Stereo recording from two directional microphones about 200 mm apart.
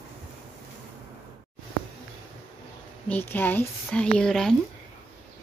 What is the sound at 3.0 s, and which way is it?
A woman's voice, 10° left (ahead or behind).